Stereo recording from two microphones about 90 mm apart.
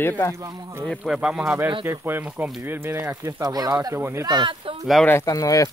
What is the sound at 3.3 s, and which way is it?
Speech, 45° right (ahead or behind).